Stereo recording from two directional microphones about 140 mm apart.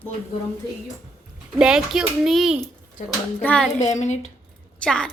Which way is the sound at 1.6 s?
5° right (ahead or behind).